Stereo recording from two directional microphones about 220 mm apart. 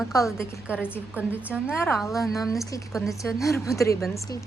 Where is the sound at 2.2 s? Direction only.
15° left (ahead or behind).